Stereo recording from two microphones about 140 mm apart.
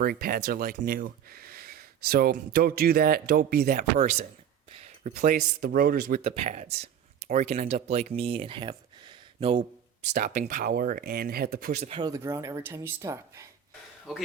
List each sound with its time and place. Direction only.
0.0 s speech: 90° right
3.9 s speech: 55° right (ahead or behind)
4.7 s a sound: 45° right (ahead or behind)
5.1 s speech: 90° right
6.2 s speech: 45° right (ahead or behind)
10.1 s speech: 65° right (ahead or behind); by 11.8 s 90° right
11.8 s speech: 45° right (ahead or behind)
12.0 s speech: 20° right (ahead or behind)
14.1 s a man's voice: 5° right (ahead or behind)